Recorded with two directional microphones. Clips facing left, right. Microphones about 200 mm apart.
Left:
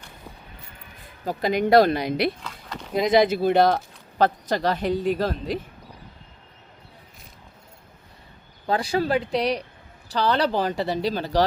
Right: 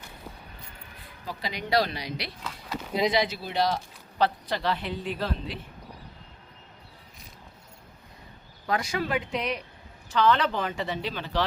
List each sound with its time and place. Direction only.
1.2 s speech: 50° left (ahead or behind)
2.4 s a sound: 5° right (ahead or behind)
3.1 s speech: 50° left (ahead or behind)
8.6 s speech: 30° left (ahead or behind)